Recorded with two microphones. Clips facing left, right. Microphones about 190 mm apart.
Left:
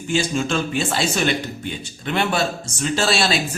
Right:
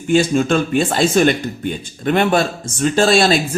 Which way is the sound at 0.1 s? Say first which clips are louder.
Right 7 dB; 55° right (ahead or behind).